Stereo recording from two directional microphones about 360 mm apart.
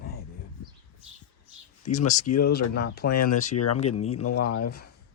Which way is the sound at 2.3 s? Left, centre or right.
Left.